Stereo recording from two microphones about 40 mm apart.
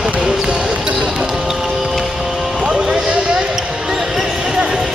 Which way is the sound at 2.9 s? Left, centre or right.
Right.